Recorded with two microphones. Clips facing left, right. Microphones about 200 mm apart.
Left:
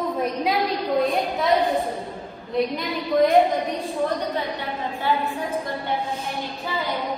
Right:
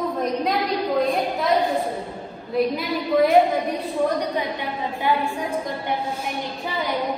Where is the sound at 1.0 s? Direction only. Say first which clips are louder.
Even; centre (ahead or behind).